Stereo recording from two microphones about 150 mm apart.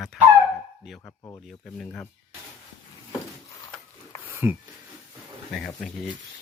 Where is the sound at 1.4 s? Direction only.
5° left (ahead or behind).